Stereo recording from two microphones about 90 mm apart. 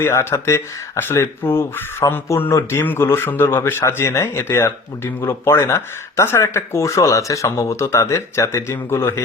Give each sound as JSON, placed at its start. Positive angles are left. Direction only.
{"t": 0.0, "sound": "speech", "side_deg": 30}